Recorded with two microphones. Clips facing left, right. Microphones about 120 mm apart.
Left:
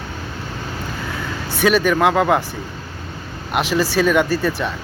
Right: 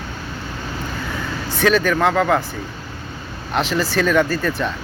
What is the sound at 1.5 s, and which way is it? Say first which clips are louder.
Speech: left 1 dB; 10° left (ahead or behind).